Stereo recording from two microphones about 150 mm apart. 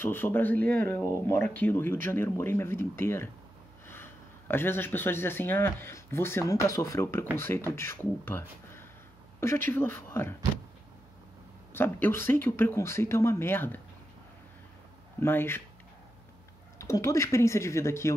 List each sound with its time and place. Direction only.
0.0 s speech: 15° left (ahead or behind)
11.7 s speech: 15° left (ahead or behind)
15.1 s speech: 15° left (ahead or behind)
16.7 s speech: 20° left (ahead or behind)